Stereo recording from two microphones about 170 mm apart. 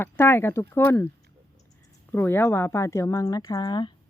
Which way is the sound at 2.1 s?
10° left (ahead or behind).